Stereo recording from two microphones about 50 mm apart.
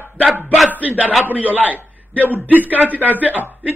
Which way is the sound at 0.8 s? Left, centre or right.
Right.